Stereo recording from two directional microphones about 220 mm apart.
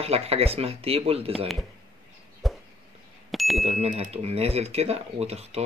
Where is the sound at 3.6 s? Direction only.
30° right (ahead or behind).